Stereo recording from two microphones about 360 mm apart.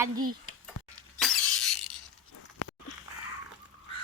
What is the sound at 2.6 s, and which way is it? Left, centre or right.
Walk, left.